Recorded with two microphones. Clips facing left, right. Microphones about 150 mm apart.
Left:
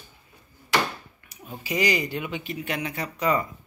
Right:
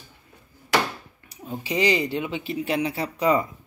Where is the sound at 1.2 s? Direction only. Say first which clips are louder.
Right 10 dB; 25° right (ahead or behind).